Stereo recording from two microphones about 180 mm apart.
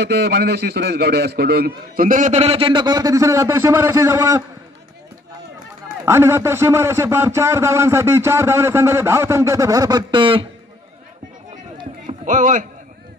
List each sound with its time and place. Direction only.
0.0 s a man's voice: 65° right (ahead or behind); by 4.4 s 15° right (ahead or behind)
6.0 s a man's voice: 15° right (ahead or behind)
12.3 s a man's voice: 45° right (ahead or behind)